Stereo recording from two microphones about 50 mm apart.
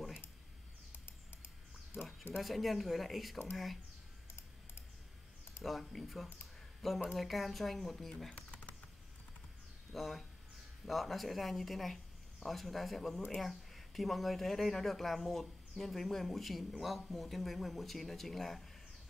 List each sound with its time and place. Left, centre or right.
2.0 s a sound: centre
2.3 s speech: centre
5.6 s speech: centre
8.4 s typing: left
9.9 s speech: centre